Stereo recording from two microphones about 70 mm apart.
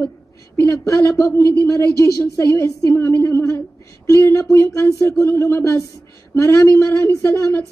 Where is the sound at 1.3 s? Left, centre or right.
Left.